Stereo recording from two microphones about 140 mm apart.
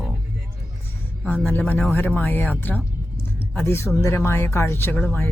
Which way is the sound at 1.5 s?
15° left (ahead or behind).